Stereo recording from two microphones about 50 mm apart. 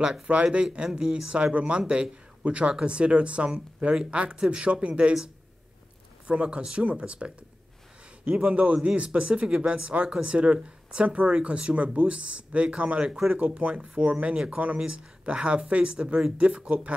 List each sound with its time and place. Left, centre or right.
0.3 s speech: right
6.2 s speech: right